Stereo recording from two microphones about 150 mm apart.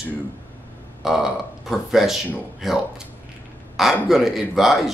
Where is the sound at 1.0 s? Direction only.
Centre (ahead or behind).